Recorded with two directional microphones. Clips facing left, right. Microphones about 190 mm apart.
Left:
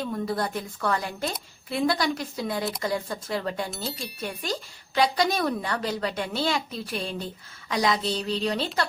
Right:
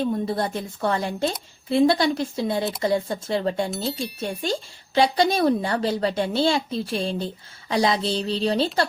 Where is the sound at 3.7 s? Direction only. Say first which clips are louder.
Right 6 dB; centre (ahead or behind).